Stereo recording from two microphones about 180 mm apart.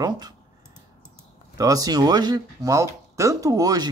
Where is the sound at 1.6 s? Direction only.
20° right (ahead or behind).